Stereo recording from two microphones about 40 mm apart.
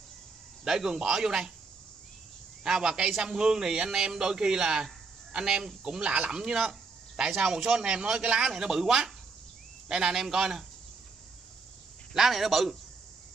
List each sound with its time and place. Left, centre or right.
0.7 s a man's voice: centre
2.6 s a man's voice: centre
6.3 s a man's voice: centre
12.1 s a man's voice: centre